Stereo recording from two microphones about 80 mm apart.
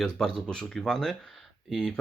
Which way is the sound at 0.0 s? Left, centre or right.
Centre.